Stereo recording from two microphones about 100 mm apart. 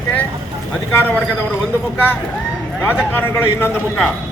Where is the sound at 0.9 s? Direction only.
20° left (ahead or behind).